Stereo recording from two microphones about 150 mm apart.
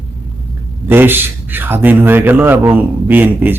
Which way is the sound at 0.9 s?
15° right (ahead or behind).